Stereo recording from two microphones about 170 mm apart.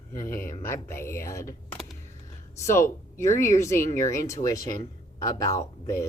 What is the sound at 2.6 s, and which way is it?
Speech, 15° left (ahead or behind).